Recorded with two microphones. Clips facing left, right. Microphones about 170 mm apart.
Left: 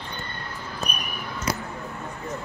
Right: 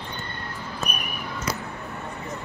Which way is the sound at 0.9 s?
55° right (ahead or behind).